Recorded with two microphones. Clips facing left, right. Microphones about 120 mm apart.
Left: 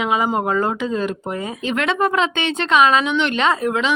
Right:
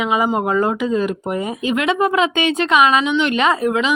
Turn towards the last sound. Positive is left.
turn(degrees=-5)  # may be behind; listen again after turning